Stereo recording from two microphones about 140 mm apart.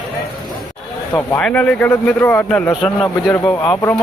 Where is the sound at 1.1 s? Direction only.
15° left (ahead or behind).